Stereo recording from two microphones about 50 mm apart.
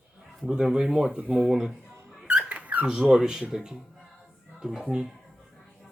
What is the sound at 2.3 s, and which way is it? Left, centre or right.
Squeak, right.